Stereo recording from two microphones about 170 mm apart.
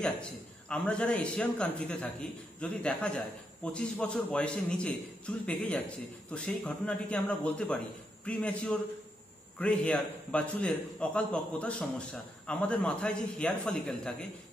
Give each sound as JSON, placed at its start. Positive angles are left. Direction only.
{"t": 0.0, "sound": "a man's voice", "side_deg": 5}